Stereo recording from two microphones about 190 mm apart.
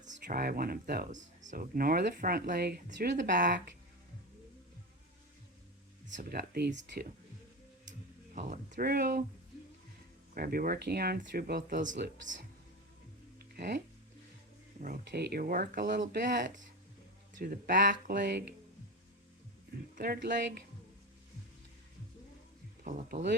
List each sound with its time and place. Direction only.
0.3 s speech: 50° right (ahead or behind)
6.1 s speech: 50° right (ahead or behind)
8.4 s speech: 45° right (ahead or behind)
10.3 s speech: 50° right (ahead or behind)
11.9 s speech: 65° right (ahead or behind)
13.6 s speech: 60° right (ahead or behind)
17.4 s speech: 55° right (ahead or behind)
20.0 s speech: 55° right (ahead or behind)
22.8 s speech: 50° right (ahead or behind)